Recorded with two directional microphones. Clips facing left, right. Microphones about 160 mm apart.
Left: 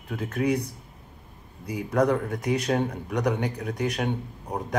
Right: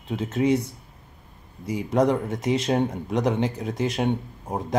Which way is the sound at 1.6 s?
20° right (ahead or behind).